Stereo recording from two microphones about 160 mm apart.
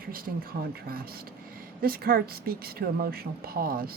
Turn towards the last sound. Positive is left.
turn(degrees=-65)  # may be behind; listen again after turning